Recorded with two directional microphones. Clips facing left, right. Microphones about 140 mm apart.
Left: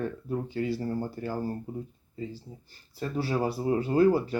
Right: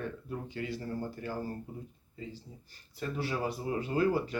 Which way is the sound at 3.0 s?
35° left (ahead or behind).